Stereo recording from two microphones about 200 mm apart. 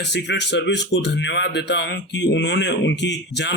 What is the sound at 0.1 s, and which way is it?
Speech, 60° left (ahead or behind).